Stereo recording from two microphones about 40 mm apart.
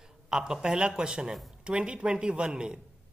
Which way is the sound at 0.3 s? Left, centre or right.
Centre.